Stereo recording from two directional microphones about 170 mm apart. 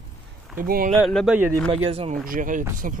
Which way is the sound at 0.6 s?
55° right (ahead or behind).